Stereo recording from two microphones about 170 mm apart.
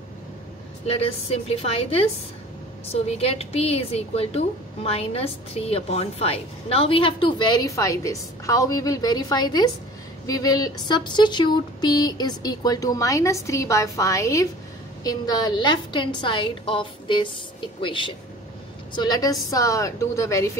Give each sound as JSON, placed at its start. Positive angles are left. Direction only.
{"t": 0.8, "sound": "a woman's voice", "side_deg": 35}